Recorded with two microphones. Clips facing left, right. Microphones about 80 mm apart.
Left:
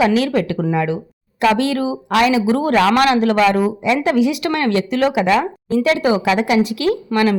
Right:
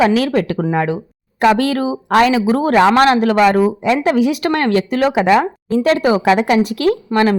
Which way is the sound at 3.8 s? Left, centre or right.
Right.